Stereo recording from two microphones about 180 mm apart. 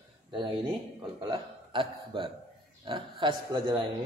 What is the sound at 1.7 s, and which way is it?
A man's voice, 30° right (ahead or behind).